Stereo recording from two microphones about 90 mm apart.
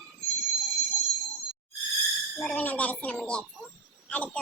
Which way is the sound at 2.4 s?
20° left (ahead or behind).